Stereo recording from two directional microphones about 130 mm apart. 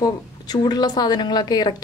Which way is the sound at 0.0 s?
30° left (ahead or behind).